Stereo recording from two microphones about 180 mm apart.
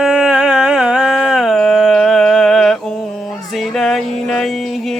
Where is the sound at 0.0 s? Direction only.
5° right (ahead or behind).